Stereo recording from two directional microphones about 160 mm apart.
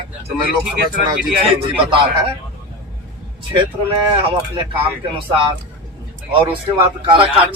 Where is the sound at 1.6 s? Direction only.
35° right (ahead or behind).